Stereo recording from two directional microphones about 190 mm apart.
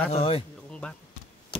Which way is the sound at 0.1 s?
30° left (ahead or behind).